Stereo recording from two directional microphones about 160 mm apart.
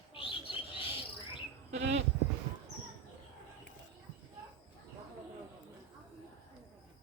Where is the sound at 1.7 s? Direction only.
45° right (ahead or behind).